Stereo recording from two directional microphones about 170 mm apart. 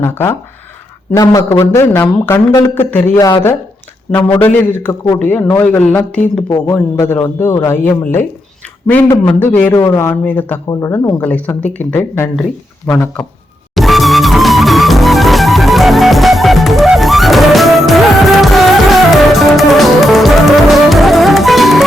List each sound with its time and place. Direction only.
0.0 s a man's voice: 10° left (ahead or behind)
13.7 s music: centre (ahead or behind)